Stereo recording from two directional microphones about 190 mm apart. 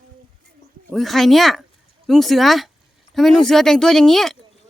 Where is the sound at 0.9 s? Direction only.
Centre (ahead or behind).